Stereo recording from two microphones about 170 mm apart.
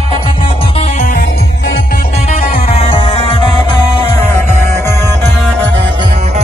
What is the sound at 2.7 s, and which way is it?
Music, 35° left (ahead or behind).